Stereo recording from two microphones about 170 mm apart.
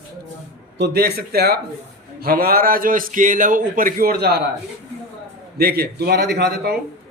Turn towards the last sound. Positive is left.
turn(degrees=-75)  # may be behind; listen again after turning